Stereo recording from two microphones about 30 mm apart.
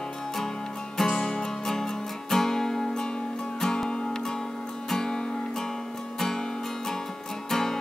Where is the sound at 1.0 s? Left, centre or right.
Left.